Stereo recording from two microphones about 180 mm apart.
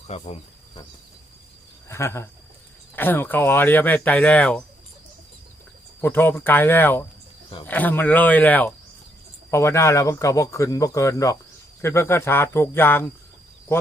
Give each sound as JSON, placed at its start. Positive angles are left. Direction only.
{"t": 0.1, "sound": "speech", "side_deg": 30}
{"t": 1.9, "sound": "speech", "side_deg": 15}
{"t": 6.0, "sound": "speech", "side_deg": 10}